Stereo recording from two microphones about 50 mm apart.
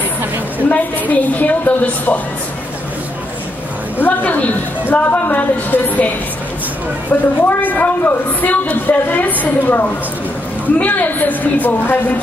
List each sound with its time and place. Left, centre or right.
0.7 s a woman's voice: left
4.0 s a woman's voice: left
7.1 s a woman's voice: left